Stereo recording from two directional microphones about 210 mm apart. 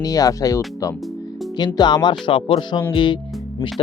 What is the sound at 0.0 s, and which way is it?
Speech, 15° left (ahead or behind).